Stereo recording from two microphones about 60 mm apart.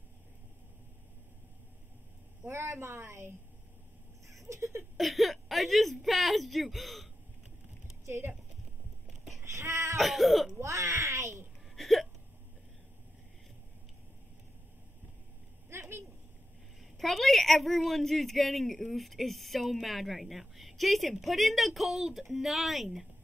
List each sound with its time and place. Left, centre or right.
2.4 s a woman's voice: right
4.3 s a sound: right
4.9 s a woman's voice: centre
8.0 s speech: right
9.4 s cat: right
9.9 s speech: centre
10.6 s a sound: right
11.7 s hiccup: centre
15.7 s a sound: right
17.0 s speech: centre